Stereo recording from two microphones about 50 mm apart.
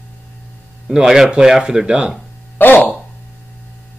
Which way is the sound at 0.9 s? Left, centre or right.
Centre.